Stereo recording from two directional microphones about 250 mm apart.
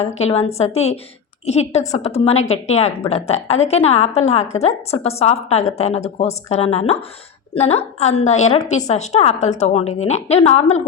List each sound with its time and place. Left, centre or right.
0.0 s a woman's voice: left